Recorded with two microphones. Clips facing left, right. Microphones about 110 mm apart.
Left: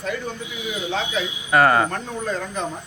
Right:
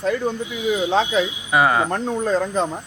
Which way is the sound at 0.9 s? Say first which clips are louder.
Right 5 dB; 35° right (ahead or behind).